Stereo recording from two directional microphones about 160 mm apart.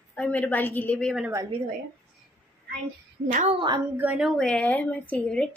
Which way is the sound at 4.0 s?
5° right (ahead or behind).